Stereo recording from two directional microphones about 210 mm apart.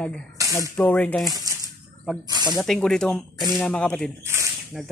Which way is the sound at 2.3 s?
20° right (ahead or behind).